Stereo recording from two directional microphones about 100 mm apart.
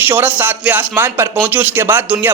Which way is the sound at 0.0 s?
20° right (ahead or behind).